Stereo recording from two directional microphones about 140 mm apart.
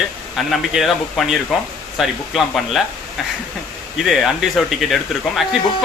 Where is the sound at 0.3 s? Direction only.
Centre (ahead or behind).